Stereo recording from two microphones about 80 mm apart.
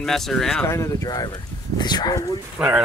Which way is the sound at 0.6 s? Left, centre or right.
Left.